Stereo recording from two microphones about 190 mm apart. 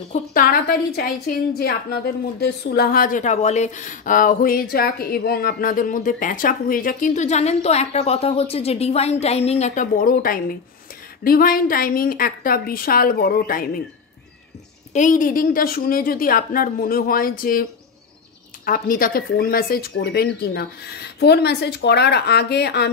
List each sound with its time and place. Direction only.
0.1 s speech: 45° left (ahead or behind)
14.9 s speech: 40° left (ahead or behind)
18.7 s speech: 50° left (ahead or behind)